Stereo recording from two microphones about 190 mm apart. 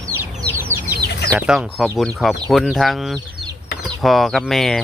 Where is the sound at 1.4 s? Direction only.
5° right (ahead or behind).